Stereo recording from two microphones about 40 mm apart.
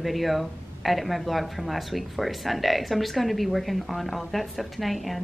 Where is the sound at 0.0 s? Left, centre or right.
Centre.